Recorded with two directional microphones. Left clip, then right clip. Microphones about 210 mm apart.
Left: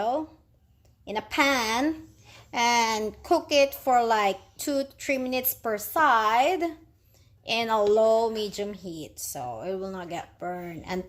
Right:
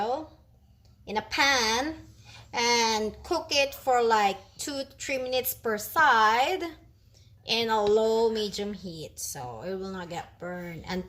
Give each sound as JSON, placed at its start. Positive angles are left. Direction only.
{"t": 1.0, "sound": "speech", "side_deg": 35}